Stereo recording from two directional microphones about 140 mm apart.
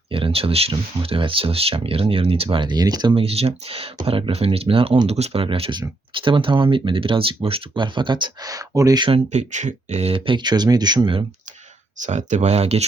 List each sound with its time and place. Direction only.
0.1 s speech: 40° right (ahead or behind); by 9.0 s 25° right (ahead or behind)
9.0 s speech: 45° right (ahead or behind)
11.9 s speech: 60° right (ahead or behind)